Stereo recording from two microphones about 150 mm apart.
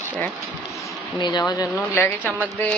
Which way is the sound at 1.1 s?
30° left (ahead or behind).